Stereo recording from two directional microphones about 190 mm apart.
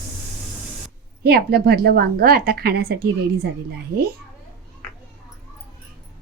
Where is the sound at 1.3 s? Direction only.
55° right (ahead or behind).